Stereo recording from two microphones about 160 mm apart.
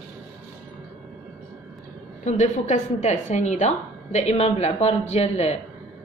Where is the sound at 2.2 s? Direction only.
50° left (ahead or behind).